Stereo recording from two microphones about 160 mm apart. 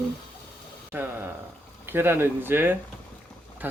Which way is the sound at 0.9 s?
15° right (ahead or behind).